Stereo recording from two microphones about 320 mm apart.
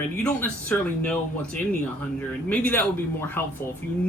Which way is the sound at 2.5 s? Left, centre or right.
Centre.